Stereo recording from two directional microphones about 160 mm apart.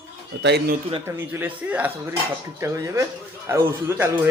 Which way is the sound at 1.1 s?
15° right (ahead or behind).